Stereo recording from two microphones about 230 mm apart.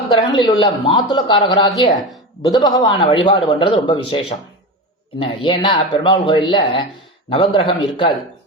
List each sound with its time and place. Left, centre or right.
0.1 s a man's voice: centre